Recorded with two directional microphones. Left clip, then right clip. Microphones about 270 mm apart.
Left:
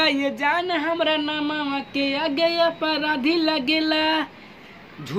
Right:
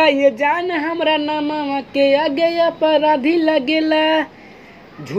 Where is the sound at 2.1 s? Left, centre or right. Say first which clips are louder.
Right 6 dB; left.